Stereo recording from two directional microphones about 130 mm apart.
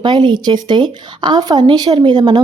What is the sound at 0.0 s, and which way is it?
Speech, 35° right (ahead or behind).